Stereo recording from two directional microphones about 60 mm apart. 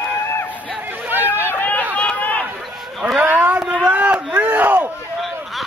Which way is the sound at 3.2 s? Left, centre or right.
Right.